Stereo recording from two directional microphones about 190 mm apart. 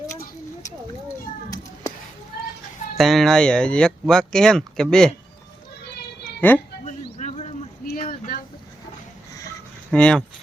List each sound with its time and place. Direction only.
3.0 s speech: centre (ahead or behind)
6.4 s speech: 10° left (ahead or behind)
6.8 s insect: 35° left (ahead or behind)
7.9 s a sound: 45° left (ahead or behind)
9.9 s speech: 5° left (ahead or behind)